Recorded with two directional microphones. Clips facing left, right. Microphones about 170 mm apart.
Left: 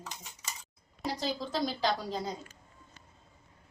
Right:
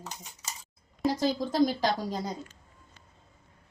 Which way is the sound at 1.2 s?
45° right (ahead or behind).